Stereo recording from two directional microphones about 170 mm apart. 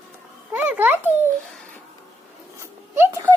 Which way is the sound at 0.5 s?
10° right (ahead or behind).